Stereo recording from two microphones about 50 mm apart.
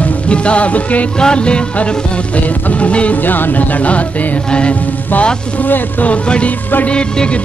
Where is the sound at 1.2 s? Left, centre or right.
Centre.